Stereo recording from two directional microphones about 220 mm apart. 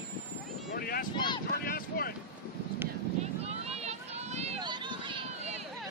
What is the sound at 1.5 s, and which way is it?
Speech, 45° left (ahead or behind).